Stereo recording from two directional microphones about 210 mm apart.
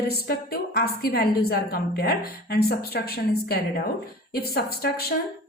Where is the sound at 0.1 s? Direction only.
50° left (ahead or behind).